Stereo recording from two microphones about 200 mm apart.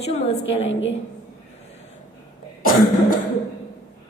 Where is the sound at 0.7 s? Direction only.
65° left (ahead or behind).